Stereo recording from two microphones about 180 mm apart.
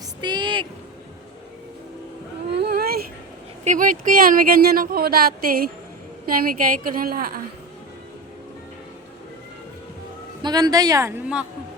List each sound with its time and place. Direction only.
0.2 s speech: 25° right (ahead or behind)
2.5 s a sound: 65° right (ahead or behind)
3.6 s speech: 45° right (ahead or behind)
10.4 s a woman's voice: 20° right (ahead or behind)